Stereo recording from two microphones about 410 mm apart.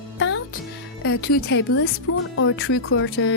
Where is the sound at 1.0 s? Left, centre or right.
Left.